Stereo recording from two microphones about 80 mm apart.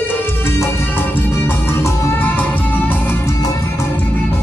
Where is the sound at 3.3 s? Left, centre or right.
Left.